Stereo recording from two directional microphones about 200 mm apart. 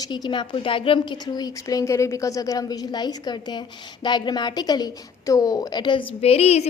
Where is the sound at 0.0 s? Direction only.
20° left (ahead or behind).